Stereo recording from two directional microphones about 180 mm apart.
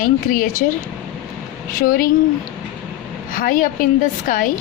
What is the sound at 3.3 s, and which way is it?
Speech, 50° left (ahead or behind).